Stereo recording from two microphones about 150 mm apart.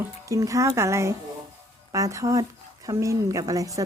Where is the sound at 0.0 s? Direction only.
20° right (ahead or behind).